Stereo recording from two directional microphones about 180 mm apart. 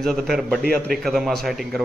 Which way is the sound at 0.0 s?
Centre (ahead or behind).